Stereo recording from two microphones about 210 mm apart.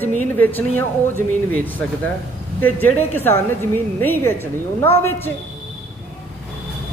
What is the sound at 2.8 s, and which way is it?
A woman's voice, 10° left (ahead or behind).